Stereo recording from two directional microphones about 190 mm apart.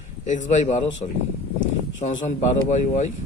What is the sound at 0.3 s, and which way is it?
Speech, 40° left (ahead or behind).